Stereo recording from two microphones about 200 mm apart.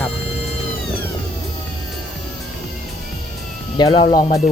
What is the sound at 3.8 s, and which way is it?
Speech, 25° left (ahead or behind).